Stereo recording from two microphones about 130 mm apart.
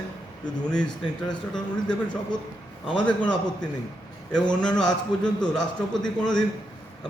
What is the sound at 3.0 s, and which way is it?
A man's voice, 10° left (ahead or behind).